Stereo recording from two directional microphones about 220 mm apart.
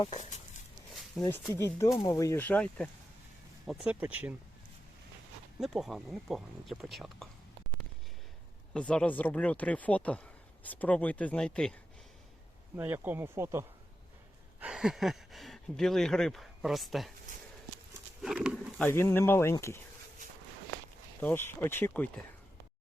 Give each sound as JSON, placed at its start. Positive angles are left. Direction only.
{"t": 0.0, "sound": "speech", "side_deg": 30}
{"t": 1.2, "sound": "speech", "side_deg": 10}
{"t": 5.5, "sound": "speech", "side_deg": 0}
{"t": 8.7, "sound": "speech", "side_deg": 5}
{"t": 12.7, "sound": "speech", "side_deg": -10}
{"t": 18.2, "sound": "speech", "side_deg": -5}
{"t": 21.2, "sound": "speech", "side_deg": 10}